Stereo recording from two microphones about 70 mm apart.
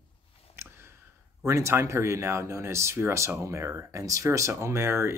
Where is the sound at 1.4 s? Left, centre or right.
Right.